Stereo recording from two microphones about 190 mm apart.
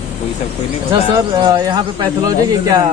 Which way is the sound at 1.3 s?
20° right (ahead or behind).